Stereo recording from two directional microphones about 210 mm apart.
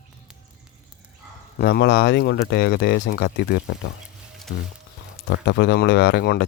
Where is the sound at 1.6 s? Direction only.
50° left (ahead or behind).